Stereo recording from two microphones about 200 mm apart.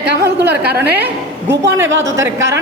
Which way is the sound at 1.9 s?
70° right (ahead or behind).